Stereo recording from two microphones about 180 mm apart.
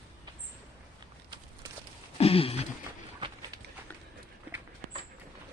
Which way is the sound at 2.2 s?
30° left (ahead or behind).